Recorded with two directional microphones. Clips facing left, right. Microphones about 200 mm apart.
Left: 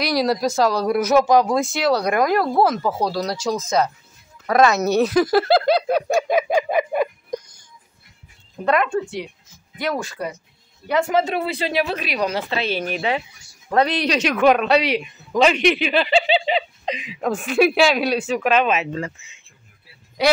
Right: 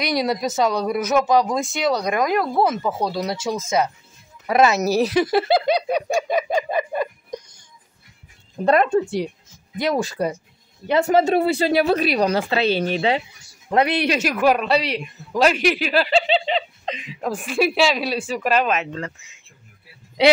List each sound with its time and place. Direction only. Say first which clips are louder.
0.0 s speech: left 2 dB; centre (ahead or behind)
4.5 s speech: left 1 dB; 5° right (ahead or behind)
4.8 s speech: left 1 dB; 30° right (ahead or behind)
5.3 s a sound: left 2 dB; centre (ahead or behind)
8.6 s speech: right 3 dB; 35° right (ahead or behind)
9.8 s speech: right 3 dB; 15° right (ahead or behind)
10.0 s speech: right 5 dB; 35° right (ahead or behind)
12.7 s speech: right 3 dB; 30° right (ahead or behind)
13.7 s speech: even; 10° right (ahead or behind); by 19.3 s 10° left (ahead or behind)